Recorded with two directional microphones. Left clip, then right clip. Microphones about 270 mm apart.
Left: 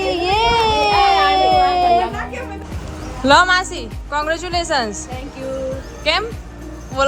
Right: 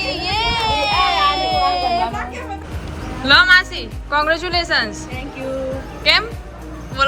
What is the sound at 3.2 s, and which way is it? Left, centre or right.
A woman's voice, centre.